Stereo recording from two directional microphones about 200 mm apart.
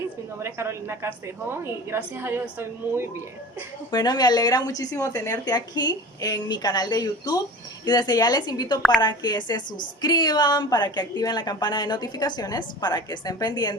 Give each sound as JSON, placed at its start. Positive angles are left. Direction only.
{"t": 0.3, "sound": "a woman's voice", "side_deg": -15}
{"t": 3.9, "sound": "a woman's voice", "side_deg": 20}